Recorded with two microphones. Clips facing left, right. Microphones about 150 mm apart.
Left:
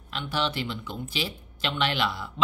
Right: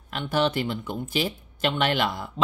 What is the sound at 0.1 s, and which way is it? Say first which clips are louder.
Speech: right 5 dB; 50° right (ahead or behind).